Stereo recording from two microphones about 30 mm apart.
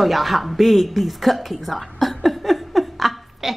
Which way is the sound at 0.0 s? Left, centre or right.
Centre.